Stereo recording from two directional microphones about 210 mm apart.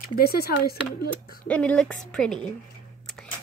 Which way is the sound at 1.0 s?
5° left (ahead or behind).